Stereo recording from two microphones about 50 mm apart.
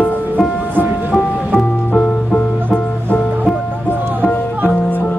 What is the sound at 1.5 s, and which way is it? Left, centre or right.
Music, centre.